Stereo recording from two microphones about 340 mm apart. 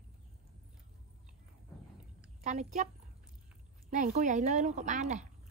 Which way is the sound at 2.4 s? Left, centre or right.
Centre.